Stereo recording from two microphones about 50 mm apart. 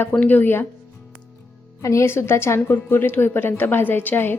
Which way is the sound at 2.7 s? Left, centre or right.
Left.